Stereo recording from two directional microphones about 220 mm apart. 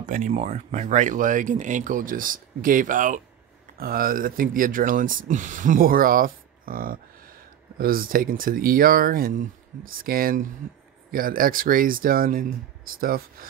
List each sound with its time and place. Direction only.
0.0 s speech: 35° right (ahead or behind)